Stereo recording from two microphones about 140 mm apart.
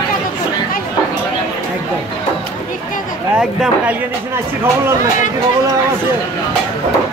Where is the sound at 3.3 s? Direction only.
5° right (ahead or behind).